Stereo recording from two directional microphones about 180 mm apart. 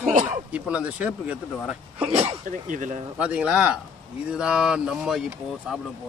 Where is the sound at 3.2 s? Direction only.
5° right (ahead or behind).